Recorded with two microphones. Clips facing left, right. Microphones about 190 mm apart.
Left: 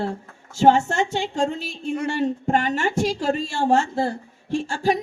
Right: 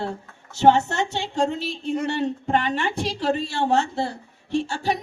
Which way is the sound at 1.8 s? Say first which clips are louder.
Left 2 dB; 50° left (ahead or behind).